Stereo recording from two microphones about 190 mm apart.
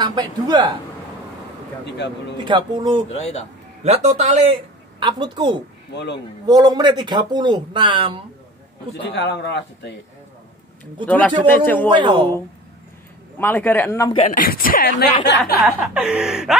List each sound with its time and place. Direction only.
0.0 s speech: 20° right (ahead or behind)
1.9 s a man's voice: 65° left (ahead or behind)
2.3 s speech: 25° right (ahead or behind)
3.1 s speech: 35° left (ahead or behind)
3.8 s a man's voice: 35° right (ahead or behind)
5.0 s speech: 25° right (ahead or behind)
9.1 s a man's voice: 65° left (ahead or behind)
11.1 s a man's voice: 10° left (ahead or behind)
11.9 s speech: 25° right (ahead or behind)
13.4 s a man's voice: 10° left (ahead or behind)
14.2 s speech: 45° left (ahead or behind)
15.6 s a sound: 5° right (ahead or behind)